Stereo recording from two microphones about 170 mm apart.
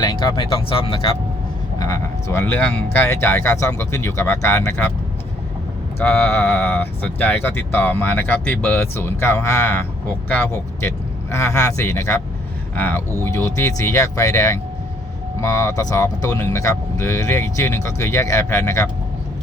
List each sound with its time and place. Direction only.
0.0 s speech: 25° left (ahead or behind)
1.8 s speech: 20° left (ahead or behind)
6.0 s speech: 15° left (ahead or behind)